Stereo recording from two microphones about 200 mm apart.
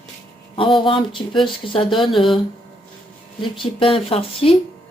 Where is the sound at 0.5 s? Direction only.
25° left (ahead or behind).